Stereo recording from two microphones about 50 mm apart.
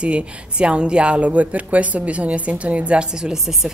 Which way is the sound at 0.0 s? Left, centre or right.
Right.